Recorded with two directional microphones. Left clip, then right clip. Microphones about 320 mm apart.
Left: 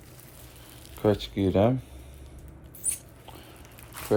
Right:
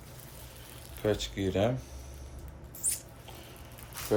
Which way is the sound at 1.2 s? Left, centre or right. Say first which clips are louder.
Left 6 dB; centre.